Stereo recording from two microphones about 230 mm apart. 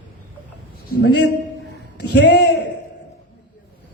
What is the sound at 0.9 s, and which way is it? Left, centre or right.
A man's voice, left.